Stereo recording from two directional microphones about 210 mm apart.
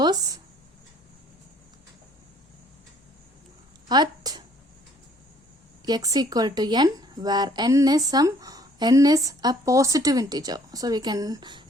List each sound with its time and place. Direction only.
0.0 s speech: 20° right (ahead or behind)
3.8 s speech: 20° right (ahead or behind)
5.8 s speech: 20° right (ahead or behind)